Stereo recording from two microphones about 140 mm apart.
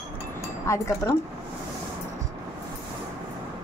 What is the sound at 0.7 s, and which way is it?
Speech, 20° left (ahead or behind).